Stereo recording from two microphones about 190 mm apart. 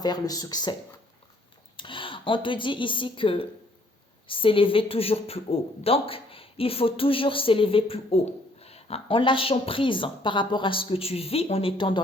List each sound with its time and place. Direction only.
0.0 s a woman's voice: 20° left (ahead or behind)